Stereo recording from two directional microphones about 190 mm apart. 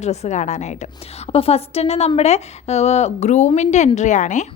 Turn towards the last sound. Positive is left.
turn(degrees=40)  # may be behind; listen again after turning